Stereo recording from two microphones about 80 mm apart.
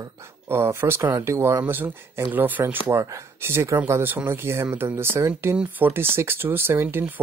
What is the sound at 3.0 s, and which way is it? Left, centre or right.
Speech, right.